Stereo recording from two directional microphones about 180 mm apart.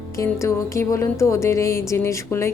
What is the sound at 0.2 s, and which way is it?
Speech, 15° left (ahead or behind).